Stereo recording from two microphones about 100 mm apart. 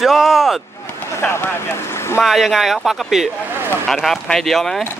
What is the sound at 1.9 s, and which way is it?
Boat, 25° left (ahead or behind).